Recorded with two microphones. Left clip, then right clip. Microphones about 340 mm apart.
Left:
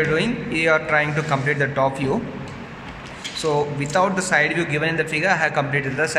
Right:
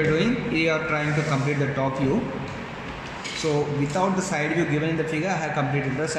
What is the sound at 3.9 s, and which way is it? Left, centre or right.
A man's voice, left.